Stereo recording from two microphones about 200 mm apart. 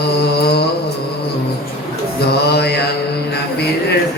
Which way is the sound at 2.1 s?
55° left (ahead or behind).